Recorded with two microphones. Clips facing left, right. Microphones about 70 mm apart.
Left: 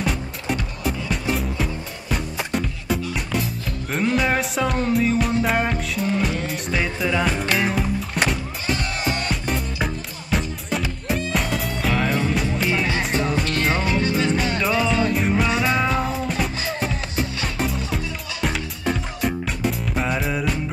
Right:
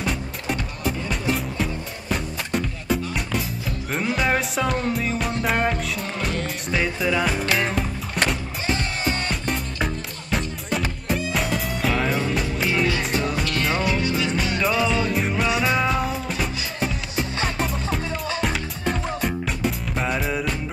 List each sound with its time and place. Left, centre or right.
0.0 s music: centre
13.7 s music: left
14.6 s music: centre
17.6 s music: centre